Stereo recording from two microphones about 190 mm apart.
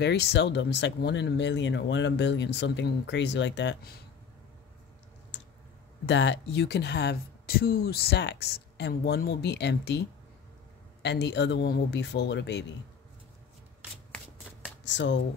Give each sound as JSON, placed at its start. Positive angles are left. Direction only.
{"t": 0.0, "sound": "speech", "side_deg": 60}
{"t": 5.3, "sound": "a sound", "side_deg": 70}
{"t": 6.0, "sound": "speech", "side_deg": 70}
{"t": 14.9, "sound": "speech", "side_deg": 70}